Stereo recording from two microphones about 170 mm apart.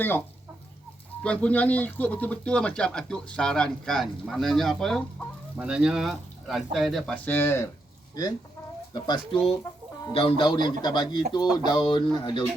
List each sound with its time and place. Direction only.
0.0 s speech: 10° left (ahead or behind); by 12.5 s 30° left (ahead or behind)